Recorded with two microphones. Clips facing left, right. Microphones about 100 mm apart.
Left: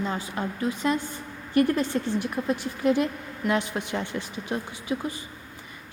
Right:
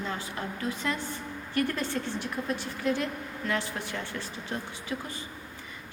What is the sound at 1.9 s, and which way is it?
Speech, 30° left (ahead or behind).